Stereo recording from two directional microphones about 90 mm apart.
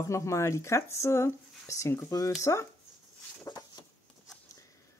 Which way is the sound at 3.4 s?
45° left (ahead or behind).